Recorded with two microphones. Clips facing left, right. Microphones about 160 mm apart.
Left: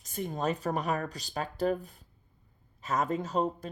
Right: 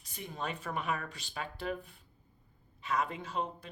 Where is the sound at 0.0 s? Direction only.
45° left (ahead or behind).